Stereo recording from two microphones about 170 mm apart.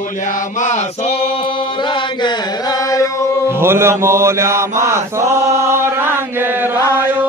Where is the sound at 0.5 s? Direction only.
45° left (ahead or behind); by 3.0 s 20° left (ahead or behind).